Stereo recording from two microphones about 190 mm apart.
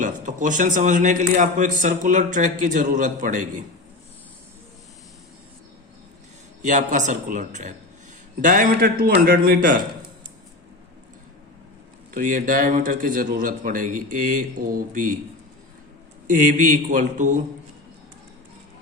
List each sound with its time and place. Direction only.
0.0 s a man's voice: 40° right (ahead or behind)
6.6 s a man's voice: 40° right (ahead or behind)
12.1 s a man's voice: 45° right (ahead or behind)
16.2 s a man's voice: 45° right (ahead or behind)